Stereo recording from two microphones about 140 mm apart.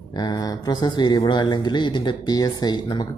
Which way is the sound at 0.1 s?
30° left (ahead or behind).